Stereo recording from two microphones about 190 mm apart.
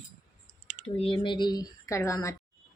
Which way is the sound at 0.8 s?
30° left (ahead or behind).